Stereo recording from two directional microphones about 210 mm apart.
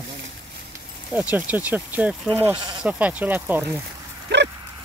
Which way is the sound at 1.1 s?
5° right (ahead or behind).